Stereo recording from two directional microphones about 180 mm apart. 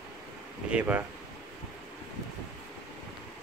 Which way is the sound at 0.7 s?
10° right (ahead or behind).